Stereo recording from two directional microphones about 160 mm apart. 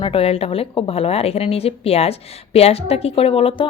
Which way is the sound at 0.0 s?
35° left (ahead or behind).